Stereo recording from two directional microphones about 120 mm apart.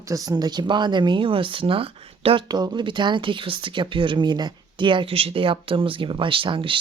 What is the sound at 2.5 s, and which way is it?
Speech, 35° right (ahead or behind).